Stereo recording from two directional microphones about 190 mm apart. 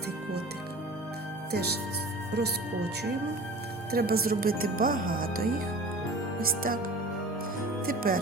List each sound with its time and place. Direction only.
1.5 s speech: 55° right (ahead or behind)
7.9 s speech: 50° right (ahead or behind)